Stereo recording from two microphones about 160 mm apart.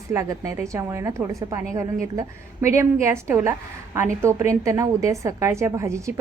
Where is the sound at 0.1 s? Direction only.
15° right (ahead or behind).